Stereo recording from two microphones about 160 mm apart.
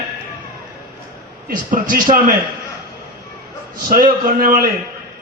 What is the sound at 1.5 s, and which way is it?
Speech, 55° right (ahead or behind).